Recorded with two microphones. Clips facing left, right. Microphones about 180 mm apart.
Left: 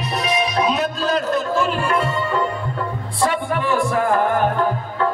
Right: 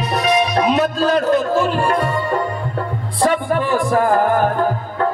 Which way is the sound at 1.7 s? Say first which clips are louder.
Right 3 dB; 40° right (ahead or behind).